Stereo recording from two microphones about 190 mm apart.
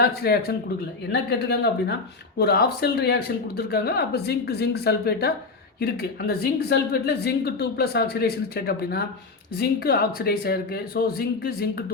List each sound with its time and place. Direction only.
0.0 s a woman's voice: 55° left (ahead or behind)